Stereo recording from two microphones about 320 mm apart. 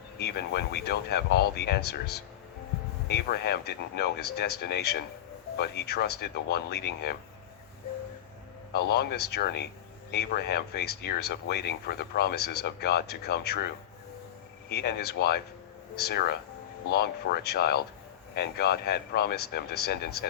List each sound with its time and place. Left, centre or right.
0.2 s speech: left
8.7 s speech: left
14.7 s speech: left